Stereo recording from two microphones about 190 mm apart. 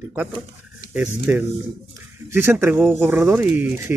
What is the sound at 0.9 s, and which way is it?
Speech, 10° right (ahead or behind).